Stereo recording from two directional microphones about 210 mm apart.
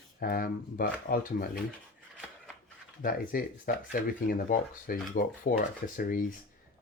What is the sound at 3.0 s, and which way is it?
Speech, 40° left (ahead or behind).